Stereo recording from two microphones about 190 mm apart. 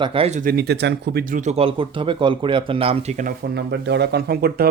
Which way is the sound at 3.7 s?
65° right (ahead or behind).